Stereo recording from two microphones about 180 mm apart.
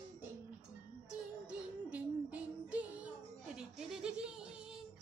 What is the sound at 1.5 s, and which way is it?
Child singing, 10° right (ahead or behind).